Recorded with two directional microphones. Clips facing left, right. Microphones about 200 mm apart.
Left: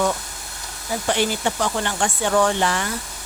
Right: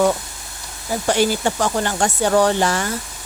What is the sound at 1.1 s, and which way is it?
Speech, 45° right (ahead or behind).